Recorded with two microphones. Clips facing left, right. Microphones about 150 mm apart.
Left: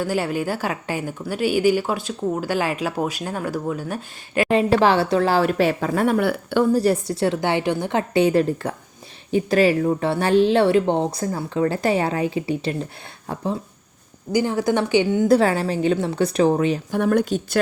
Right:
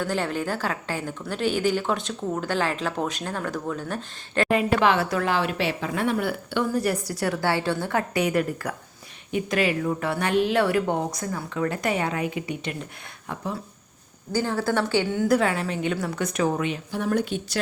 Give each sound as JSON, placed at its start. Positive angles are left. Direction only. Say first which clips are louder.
{"t": 0.0, "sound": "speech", "louder": "left 4 dB", "side_deg": 10}
{"t": 4.4, "sound": "a woman's voice", "louder": "left 4 dB", "side_deg": 30}
{"t": 14.3, "sound": "speech", "louder": "left 4 dB", "side_deg": 15}
{"t": 15.3, "sound": "speech", "louder": "left 5 dB", "side_deg": 35}
{"t": 16.9, "sound": "speech", "louder": "left 5 dB", "side_deg": 60}